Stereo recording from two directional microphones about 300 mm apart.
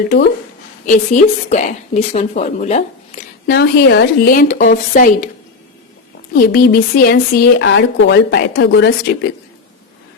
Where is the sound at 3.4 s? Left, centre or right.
Left.